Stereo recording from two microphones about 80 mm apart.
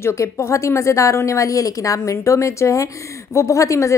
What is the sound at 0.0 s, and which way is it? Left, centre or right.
A woman's voice, left.